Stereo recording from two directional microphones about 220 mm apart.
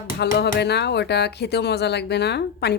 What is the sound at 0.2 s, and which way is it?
Speech, 50° left (ahead or behind).